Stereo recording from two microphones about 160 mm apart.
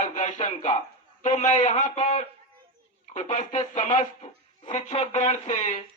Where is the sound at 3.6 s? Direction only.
30° left (ahead or behind).